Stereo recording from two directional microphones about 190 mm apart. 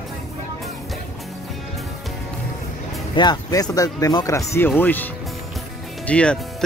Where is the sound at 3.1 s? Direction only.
25° left (ahead or behind); by 6.6 s 5° left (ahead or behind).